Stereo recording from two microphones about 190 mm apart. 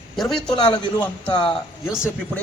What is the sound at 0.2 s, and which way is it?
Speech, centre (ahead or behind).